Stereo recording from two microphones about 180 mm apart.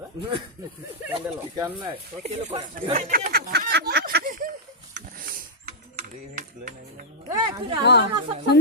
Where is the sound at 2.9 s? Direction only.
50° right (ahead or behind).